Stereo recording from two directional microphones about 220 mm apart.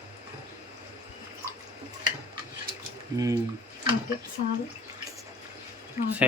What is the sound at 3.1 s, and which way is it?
Speech, 15° right (ahead or behind).